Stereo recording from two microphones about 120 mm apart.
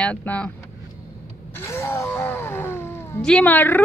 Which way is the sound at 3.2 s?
10° left (ahead or behind).